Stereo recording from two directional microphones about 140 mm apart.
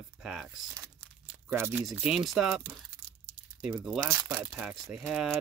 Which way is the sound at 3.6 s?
5° right (ahead or behind).